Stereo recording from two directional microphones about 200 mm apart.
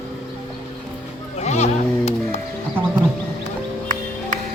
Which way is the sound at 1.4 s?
35° left (ahead or behind).